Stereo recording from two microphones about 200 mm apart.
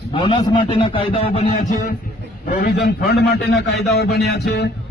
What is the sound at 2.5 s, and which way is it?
A man's voice, 50° left (ahead or behind).